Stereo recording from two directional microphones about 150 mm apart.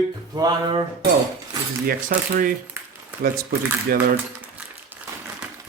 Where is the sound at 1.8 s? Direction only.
75° right (ahead or behind).